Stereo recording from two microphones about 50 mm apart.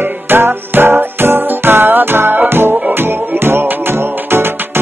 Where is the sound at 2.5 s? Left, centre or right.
Right.